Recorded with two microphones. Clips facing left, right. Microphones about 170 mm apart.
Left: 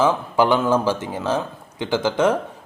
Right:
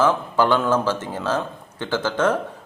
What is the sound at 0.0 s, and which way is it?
Speech, 15° left (ahead or behind).